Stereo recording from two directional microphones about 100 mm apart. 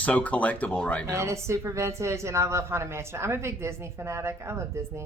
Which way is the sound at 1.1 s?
30° right (ahead or behind).